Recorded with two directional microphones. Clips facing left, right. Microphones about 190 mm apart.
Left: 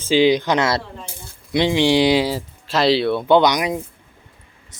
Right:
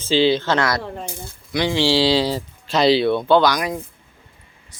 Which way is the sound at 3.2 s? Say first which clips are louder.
Left 4 dB; 20° left (ahead or behind).